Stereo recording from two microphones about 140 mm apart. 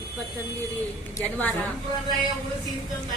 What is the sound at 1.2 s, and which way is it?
Speech, 10° left (ahead or behind).